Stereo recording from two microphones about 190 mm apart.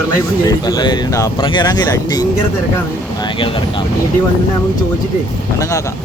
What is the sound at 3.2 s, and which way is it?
Speech, 25° left (ahead or behind).